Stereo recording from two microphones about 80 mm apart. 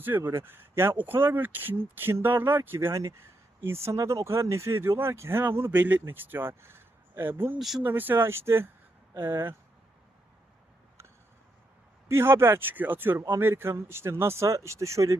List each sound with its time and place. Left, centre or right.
0.2 s speech: right
12.0 s speech: right